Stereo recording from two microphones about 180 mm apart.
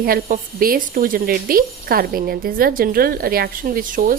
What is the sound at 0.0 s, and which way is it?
A woman's voice, 55° right (ahead or behind).